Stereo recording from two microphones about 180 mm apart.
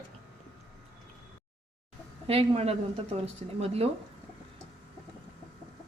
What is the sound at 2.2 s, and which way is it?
Speech, 35° right (ahead or behind).